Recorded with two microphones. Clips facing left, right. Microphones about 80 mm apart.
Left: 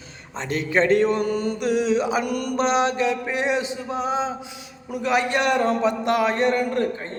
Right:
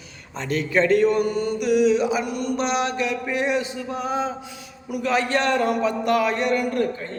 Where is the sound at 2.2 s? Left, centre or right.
Left.